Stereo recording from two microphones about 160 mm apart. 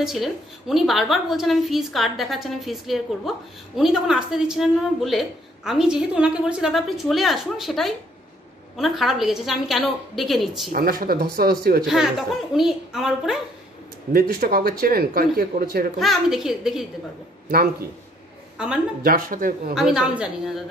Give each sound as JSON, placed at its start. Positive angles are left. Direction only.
{"t": 0.0, "sound": "a woman's voice", "side_deg": 0}
{"t": 10.7, "sound": "speech", "side_deg": -65}
{"t": 11.8, "sound": "a woman's voice", "side_deg": 0}
{"t": 14.1, "sound": "speech", "side_deg": -65}
{"t": 16.0, "sound": "a woman's voice", "side_deg": 0}
{"t": 18.6, "sound": "a woman's voice", "side_deg": -5}
{"t": 19.0, "sound": "speech", "side_deg": -60}
{"t": 19.7, "sound": "a woman's voice", "side_deg": -5}